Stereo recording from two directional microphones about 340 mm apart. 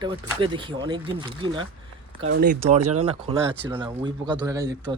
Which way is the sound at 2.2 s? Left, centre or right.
Right.